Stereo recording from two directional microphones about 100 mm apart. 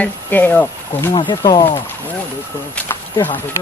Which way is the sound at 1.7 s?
20° left (ahead or behind).